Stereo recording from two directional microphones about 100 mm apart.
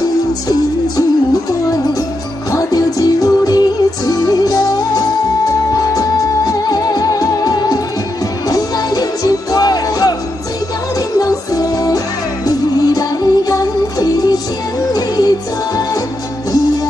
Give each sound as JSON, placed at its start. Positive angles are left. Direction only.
{"t": 2.5, "sound": "music", "side_deg": 35}